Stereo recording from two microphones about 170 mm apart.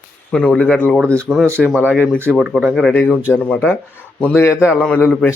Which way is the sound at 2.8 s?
5° left (ahead or behind).